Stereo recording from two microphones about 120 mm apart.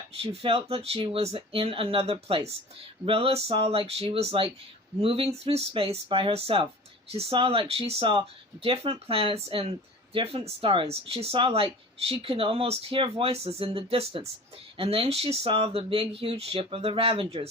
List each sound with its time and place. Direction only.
0.2 s speech: 50° right (ahead or behind)